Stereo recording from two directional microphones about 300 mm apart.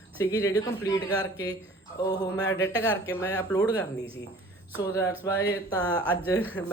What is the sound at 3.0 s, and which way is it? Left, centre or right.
Speech, centre.